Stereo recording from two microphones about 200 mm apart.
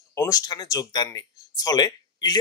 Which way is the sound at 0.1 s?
15° left (ahead or behind).